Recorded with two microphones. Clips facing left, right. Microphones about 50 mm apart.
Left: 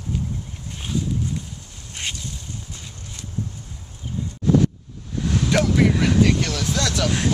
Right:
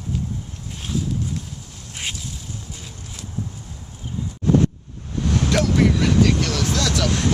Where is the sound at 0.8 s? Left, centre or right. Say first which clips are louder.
Even; centre.